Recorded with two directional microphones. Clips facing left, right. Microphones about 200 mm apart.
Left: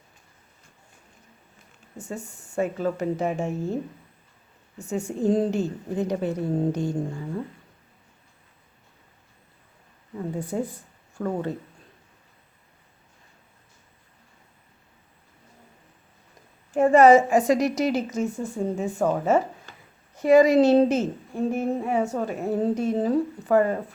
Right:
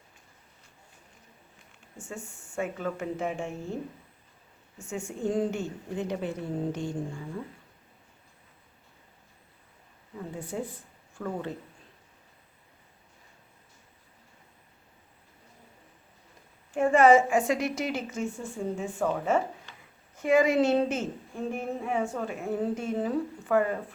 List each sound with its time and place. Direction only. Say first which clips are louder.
2.0 s a woman's voice: left 6 dB; 40° left (ahead or behind)
4.8 s a woman's voice: left 6 dB; 40° left (ahead or behind)
10.3 s a woman's voice: left 6 dB; 40° left (ahead or behind)
16.7 s a woman's voice: left 5 dB; 40° left (ahead or behind)